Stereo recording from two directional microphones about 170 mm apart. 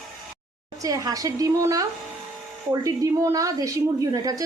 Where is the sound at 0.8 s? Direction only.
20° right (ahead or behind).